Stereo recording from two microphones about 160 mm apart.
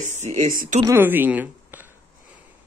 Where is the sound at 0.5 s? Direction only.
60° right (ahead or behind).